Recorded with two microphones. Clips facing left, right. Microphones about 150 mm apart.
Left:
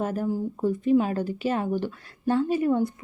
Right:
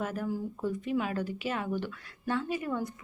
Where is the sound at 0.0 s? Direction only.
35° left (ahead or behind).